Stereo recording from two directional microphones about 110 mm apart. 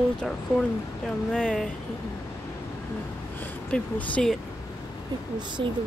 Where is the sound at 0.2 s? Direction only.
5° left (ahead or behind).